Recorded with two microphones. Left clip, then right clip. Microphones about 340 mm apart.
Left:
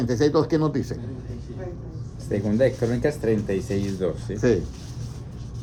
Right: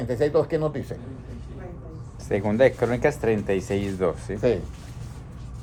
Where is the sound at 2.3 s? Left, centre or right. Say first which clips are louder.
Right 2 dB; right.